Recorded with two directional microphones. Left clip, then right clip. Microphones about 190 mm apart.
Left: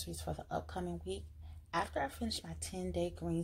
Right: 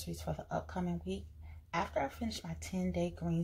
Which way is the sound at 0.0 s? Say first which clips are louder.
Right 1 dB; 40° left (ahead or behind).